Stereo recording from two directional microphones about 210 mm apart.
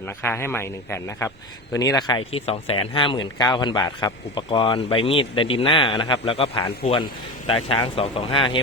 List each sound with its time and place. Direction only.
0.2 s a man's voice: 10° left (ahead or behind); by 8.4 s 25° left (ahead or behind)